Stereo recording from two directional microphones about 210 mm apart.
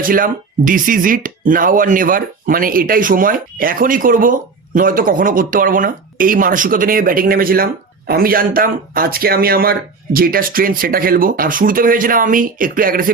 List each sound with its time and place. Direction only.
0.0 s speech: 40° right (ahead or behind)